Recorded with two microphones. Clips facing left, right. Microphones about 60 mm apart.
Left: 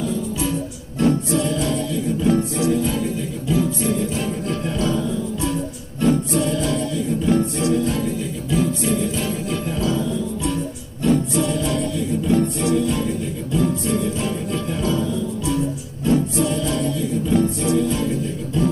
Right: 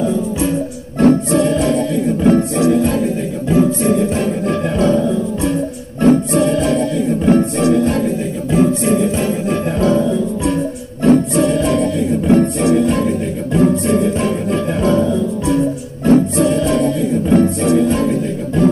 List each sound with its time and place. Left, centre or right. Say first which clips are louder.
0.9 s music: right 7 dB; right